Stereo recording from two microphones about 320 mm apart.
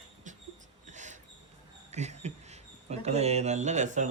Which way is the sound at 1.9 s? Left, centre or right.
Right.